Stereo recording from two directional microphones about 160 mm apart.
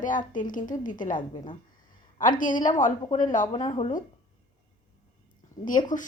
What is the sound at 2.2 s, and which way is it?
A woman's voice, 55° left (ahead or behind).